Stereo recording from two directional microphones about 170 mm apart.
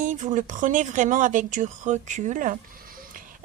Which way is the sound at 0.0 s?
50° right (ahead or behind).